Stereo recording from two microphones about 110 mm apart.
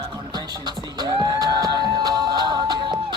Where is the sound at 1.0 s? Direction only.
40° right (ahead or behind).